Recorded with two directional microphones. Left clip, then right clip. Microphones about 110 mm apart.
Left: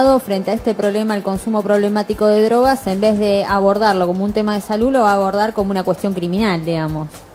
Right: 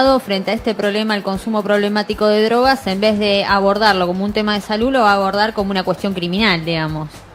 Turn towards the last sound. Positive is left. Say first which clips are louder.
# right 1 dB
turn(degrees=-20)  # may be behind; listen again after turning